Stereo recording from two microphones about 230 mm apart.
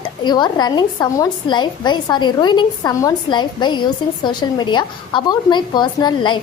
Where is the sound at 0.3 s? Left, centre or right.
Centre.